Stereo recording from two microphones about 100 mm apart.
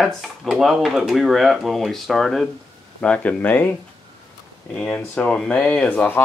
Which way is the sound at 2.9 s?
10° left (ahead or behind).